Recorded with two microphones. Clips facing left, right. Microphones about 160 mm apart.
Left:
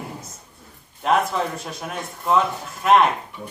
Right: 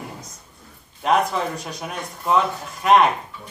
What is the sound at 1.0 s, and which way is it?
A man's voice, centre (ahead or behind).